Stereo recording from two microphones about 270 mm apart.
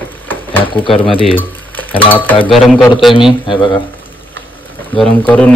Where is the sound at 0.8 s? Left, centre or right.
Centre.